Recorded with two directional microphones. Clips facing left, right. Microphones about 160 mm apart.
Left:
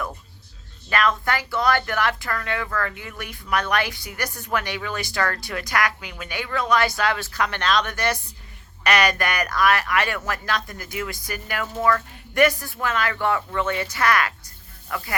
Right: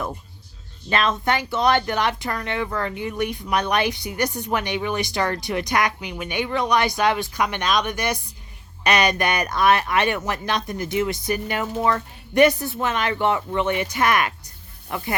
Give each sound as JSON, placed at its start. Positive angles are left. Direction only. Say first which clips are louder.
{"t": 0.9, "sound": "speech", "louder": "right 1 dB", "side_deg": -25}